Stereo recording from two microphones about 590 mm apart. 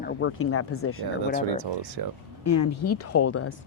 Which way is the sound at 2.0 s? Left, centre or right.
Right.